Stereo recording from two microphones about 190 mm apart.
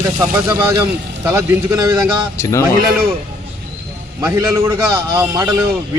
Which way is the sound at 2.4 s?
10° left (ahead or behind).